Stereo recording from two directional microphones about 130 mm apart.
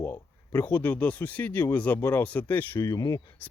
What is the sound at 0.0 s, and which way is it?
Speech, 20° left (ahead or behind).